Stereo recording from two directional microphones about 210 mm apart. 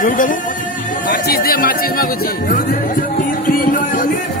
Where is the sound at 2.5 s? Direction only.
40° left (ahead or behind).